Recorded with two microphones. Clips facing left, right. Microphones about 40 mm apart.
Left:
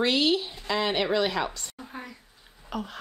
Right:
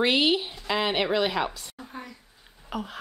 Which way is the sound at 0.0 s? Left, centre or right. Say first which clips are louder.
Right 1 dB; centre.